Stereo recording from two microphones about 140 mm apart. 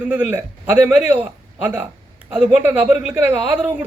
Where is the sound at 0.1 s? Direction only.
15° right (ahead or behind).